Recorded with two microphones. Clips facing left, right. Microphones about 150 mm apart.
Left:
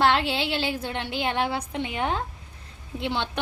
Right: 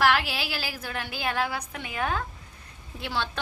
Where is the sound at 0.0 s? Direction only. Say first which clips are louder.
Left 2 dB; 25° left (ahead or behind).